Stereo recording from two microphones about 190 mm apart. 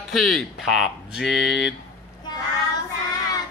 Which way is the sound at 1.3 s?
65° left (ahead or behind).